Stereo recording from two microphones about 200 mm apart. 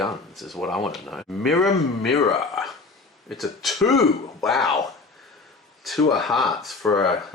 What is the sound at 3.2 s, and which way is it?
Speech, centre (ahead or behind).